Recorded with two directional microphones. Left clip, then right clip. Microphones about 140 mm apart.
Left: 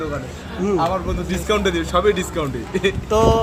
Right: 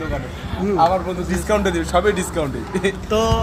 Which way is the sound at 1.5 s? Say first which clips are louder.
Even; 25° left (ahead or behind).